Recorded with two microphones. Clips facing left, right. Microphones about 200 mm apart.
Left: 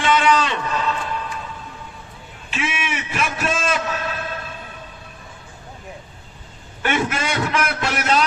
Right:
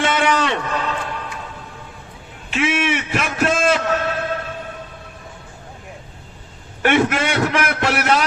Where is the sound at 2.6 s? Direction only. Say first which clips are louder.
Right 7 dB; 70° right (ahead or behind).